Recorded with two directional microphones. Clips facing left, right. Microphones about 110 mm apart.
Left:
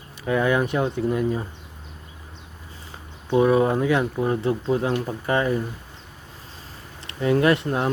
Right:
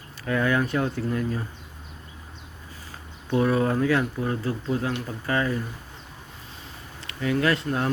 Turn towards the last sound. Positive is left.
turn(degrees=20)  # may be behind; listen again after turning